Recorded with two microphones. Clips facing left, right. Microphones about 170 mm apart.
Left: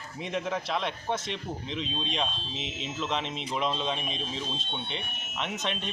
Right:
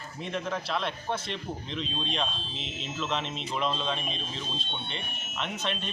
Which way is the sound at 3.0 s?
15° left (ahead or behind).